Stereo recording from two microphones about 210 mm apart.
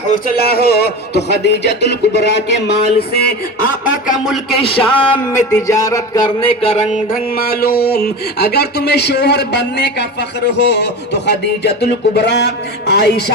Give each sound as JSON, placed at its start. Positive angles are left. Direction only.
{"t": 0.1, "sound": "speech", "side_deg": 45}
{"t": 4.6, "sound": "speech", "side_deg": 25}